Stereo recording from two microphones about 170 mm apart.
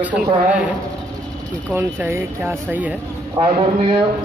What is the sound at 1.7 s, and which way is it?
Speech, 10° right (ahead or behind).